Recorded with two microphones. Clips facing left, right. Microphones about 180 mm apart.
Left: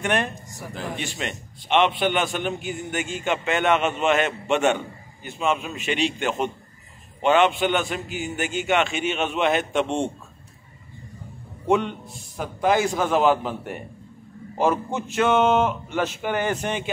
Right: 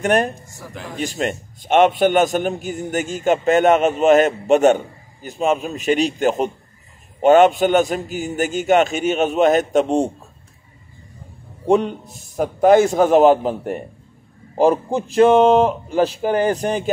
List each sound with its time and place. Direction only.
0.0 s a man's voice: 40° right (ahead or behind)
11.6 s a man's voice: 35° right (ahead or behind)